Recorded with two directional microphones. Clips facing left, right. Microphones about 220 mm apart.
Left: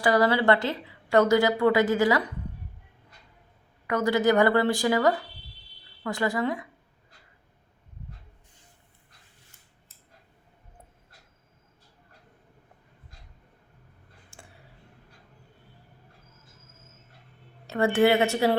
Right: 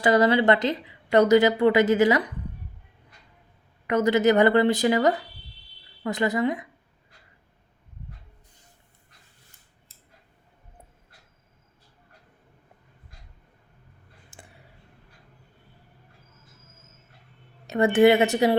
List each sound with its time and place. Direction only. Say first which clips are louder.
0.0 s a woman's voice: right 3 dB; 20° right (ahead or behind)
3.8 s a woman's voice: right 3 dB; 20° right (ahead or behind)
17.7 s a woman's voice: right 4 dB; 20° right (ahead or behind)